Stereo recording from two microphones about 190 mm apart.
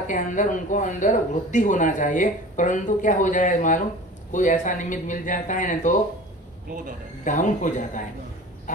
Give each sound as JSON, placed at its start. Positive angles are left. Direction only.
{"t": 0.0, "sound": "speech", "side_deg": 40}
{"t": 7.2, "sound": "speech", "side_deg": 40}
{"t": 8.7, "sound": "duck", "side_deg": 40}